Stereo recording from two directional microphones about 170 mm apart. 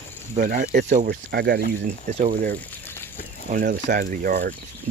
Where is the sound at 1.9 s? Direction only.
50° right (ahead or behind).